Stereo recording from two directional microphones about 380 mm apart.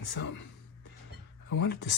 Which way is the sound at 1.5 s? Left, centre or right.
Left.